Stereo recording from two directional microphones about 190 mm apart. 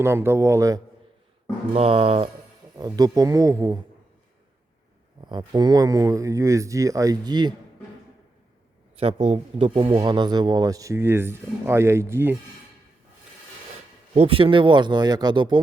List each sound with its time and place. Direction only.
0.0 s speech: 10° right (ahead or behind)
1.7 s speech: 30° right (ahead or behind)
2.7 s a man's voice: 20° right (ahead or behind)
5.2 s speech: 25° right (ahead or behind)
9.0 s a man's voice: 30° right (ahead or behind); by 12.4 s 10° right (ahead or behind)
14.1 s a man's voice: 30° right (ahead or behind)